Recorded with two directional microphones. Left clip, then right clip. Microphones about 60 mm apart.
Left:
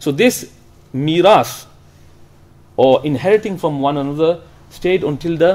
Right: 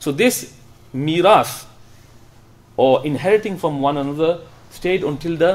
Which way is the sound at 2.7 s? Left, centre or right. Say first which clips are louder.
Left 3 dB; left.